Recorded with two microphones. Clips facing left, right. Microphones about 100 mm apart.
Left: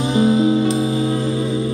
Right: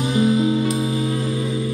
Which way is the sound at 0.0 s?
30° left (ahead or behind).